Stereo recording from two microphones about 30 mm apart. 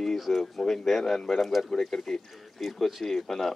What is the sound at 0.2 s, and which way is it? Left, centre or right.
Speech, centre.